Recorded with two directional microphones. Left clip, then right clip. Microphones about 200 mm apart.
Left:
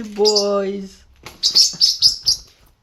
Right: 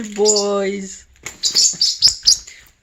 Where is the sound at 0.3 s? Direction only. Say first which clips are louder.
Even; 20° right (ahead or behind).